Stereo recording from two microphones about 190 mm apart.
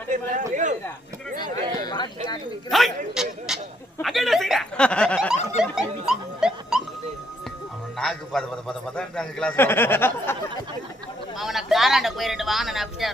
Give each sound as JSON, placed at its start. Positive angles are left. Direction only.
{"t": 0.1, "sound": "speech", "side_deg": -40}
{"t": 1.8, "sound": "speech", "side_deg": 20}
{"t": 2.6, "sound": "a man's voice", "side_deg": 0}
{"t": 5.7, "sound": "dog", "side_deg": -5}
{"t": 7.9, "sound": "a man's voice", "side_deg": 0}
{"t": 11.3, "sound": "a man's voice", "side_deg": 0}